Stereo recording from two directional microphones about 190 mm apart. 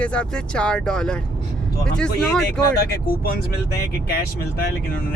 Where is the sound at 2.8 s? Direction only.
55° left (ahead or behind).